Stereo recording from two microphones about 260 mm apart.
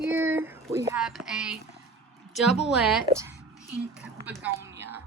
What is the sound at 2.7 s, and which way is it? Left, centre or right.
A woman's voice, centre.